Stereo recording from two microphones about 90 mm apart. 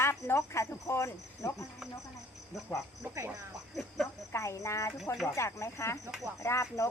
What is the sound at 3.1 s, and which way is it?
Speech, 30° right (ahead or behind).